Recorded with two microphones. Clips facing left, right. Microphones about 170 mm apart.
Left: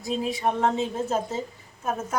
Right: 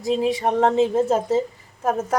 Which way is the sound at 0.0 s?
85° right.